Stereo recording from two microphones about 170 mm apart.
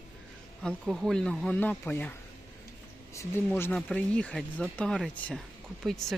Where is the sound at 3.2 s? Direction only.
15° left (ahead or behind).